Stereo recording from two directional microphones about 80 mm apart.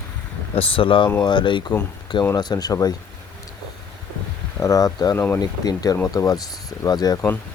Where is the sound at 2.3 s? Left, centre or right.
Left.